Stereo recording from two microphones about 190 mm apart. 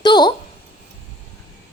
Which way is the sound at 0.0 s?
20° left (ahead or behind).